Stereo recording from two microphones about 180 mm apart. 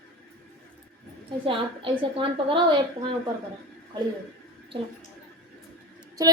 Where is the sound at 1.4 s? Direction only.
30° right (ahead or behind).